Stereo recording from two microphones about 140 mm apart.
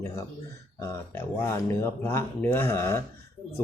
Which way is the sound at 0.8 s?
15° left (ahead or behind).